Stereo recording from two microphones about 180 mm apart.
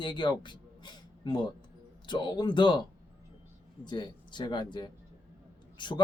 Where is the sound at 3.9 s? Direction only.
25° left (ahead or behind).